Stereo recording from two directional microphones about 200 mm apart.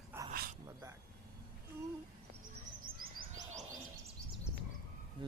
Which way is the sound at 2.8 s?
45° right (ahead or behind).